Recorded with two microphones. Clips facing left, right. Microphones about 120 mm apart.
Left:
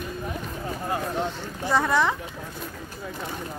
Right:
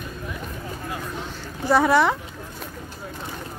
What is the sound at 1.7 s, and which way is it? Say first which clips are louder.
Speech: right 5 dB; 5° right (ahead or behind).